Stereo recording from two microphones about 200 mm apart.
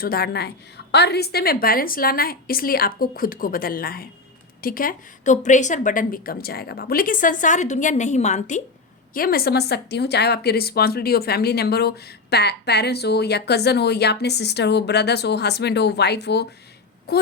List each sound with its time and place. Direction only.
0.0 s a woman's voice: 50° left (ahead or behind)
9.1 s a woman's voice: 45° left (ahead or behind)